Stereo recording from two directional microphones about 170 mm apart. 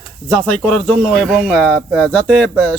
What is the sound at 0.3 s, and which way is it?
Speech, 5° left (ahead or behind).